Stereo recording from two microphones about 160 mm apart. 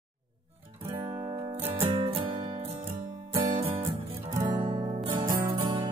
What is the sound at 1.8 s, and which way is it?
Music, 35° right (ahead or behind).